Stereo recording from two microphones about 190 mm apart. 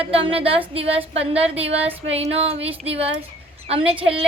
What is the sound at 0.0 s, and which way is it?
Speech, 30° right (ahead or behind).